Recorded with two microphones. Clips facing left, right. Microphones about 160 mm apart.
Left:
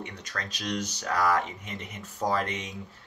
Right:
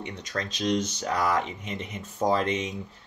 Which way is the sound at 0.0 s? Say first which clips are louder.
Right 5 dB; 20° right (ahead or behind).